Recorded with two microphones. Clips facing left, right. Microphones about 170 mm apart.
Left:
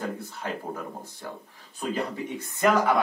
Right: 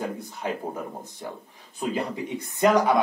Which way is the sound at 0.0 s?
15° right (ahead or behind).